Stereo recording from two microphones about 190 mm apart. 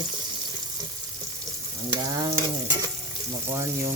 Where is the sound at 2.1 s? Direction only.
20° right (ahead or behind).